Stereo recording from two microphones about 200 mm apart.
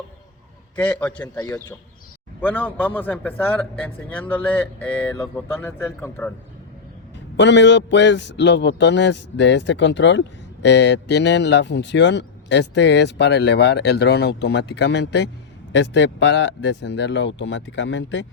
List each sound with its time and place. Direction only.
0.8 s speech: 5° left (ahead or behind)
7.3 s a man's voice: 60° left (ahead or behind)